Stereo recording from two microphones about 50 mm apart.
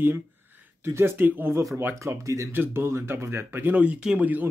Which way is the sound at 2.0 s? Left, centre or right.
Right.